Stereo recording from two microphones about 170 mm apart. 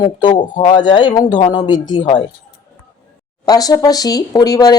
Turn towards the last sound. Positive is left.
turn(degrees=20)  # may be behind; listen again after turning